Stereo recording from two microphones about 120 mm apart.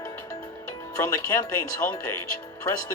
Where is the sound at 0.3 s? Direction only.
30° left (ahead or behind).